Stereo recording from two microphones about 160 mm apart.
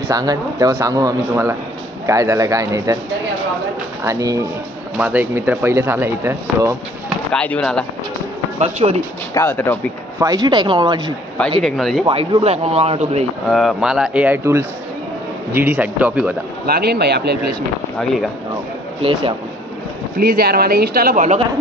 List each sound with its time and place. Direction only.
0.1 s a man's voice: 25° right (ahead or behind)
4.0 s a man's voice: 20° right (ahead or behind)
7.3 s speech: 5° left (ahead or behind)
8.5 s a man's voice: 40° right (ahead or behind)
9.3 s speech: 15° left (ahead or behind)
10.1 s a man's voice: 25° right (ahead or behind)
11.6 s speech: centre (ahead or behind)
12.1 s a man's voice: 35° right (ahead or behind)
13.5 s speech: centre (ahead or behind)
16.6 s speech: 80° right
17.9 s speech: centre (ahead or behind)
19.0 s a man's voice: 35° right (ahead or behind)
20.2 s speech: 70° right (ahead or behind)